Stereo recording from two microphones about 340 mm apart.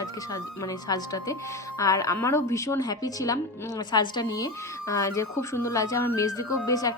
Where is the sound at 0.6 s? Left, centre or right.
Centre.